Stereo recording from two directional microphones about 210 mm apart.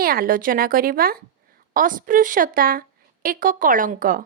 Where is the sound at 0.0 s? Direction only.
45° right (ahead or behind).